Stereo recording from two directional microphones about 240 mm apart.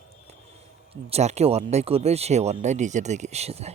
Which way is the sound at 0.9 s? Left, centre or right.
Right.